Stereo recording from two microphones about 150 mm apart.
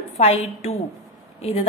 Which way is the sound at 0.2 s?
45° left (ahead or behind).